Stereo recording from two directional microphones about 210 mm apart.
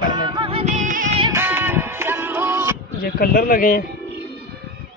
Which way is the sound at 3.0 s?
45° left (ahead or behind).